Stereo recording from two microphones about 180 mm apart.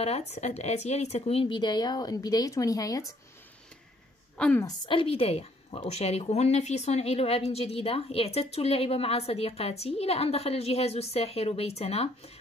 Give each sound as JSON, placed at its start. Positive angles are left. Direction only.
{"t": 0.0, "sound": "speech", "side_deg": 35}
{"t": 4.4, "sound": "a woman's voice", "side_deg": 5}
{"t": 4.6, "sound": "a woman's voice", "side_deg": 30}